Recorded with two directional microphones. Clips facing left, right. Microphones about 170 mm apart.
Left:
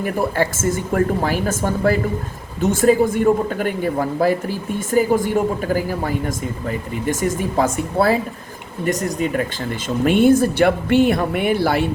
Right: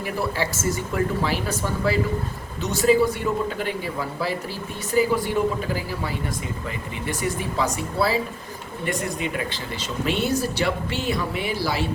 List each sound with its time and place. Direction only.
0.0 s a man's voice: 50° left (ahead or behind)